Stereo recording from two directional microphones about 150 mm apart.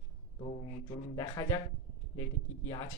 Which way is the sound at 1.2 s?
20° left (ahead or behind).